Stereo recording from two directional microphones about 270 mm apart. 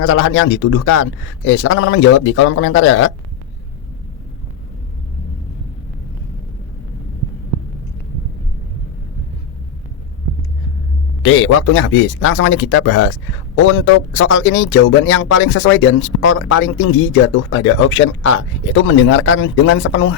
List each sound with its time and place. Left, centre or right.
0.0 s speech: left
11.2 s speech: left